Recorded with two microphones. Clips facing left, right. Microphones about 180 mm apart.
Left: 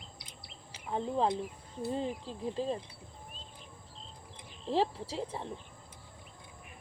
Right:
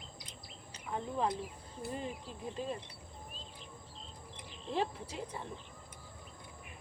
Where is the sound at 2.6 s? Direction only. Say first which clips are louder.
Left 5 dB; 30° left (ahead or behind).